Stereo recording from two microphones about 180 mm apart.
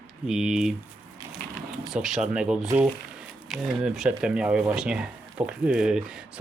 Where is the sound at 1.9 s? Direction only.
Centre (ahead or behind).